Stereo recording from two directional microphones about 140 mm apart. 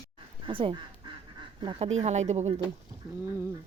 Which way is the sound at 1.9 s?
55° right (ahead or behind).